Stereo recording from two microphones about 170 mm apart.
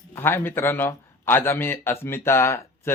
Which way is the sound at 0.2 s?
15° left (ahead or behind).